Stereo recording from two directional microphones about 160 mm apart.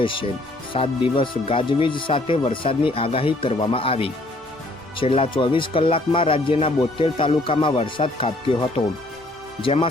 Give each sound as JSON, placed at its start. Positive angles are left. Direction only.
{"t": 0.0, "sound": "speech", "side_deg": 35}